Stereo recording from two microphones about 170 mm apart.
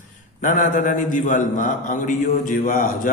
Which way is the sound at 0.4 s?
50° left (ahead or behind).